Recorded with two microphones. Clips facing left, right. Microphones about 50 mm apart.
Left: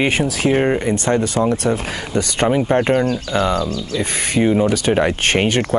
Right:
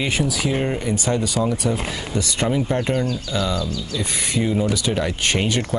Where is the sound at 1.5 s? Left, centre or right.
Left.